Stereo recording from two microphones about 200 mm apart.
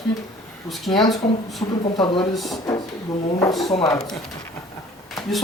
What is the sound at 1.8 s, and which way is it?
Speech, 25° left (ahead or behind).